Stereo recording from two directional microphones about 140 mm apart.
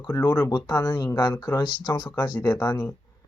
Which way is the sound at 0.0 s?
25° left (ahead or behind).